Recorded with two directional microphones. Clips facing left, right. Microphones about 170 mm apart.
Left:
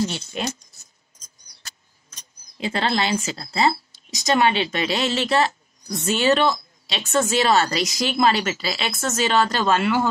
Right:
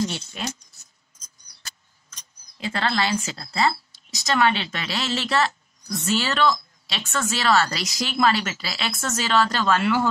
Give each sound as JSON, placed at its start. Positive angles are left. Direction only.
{"t": 2.5, "sound": "speech", "side_deg": 20}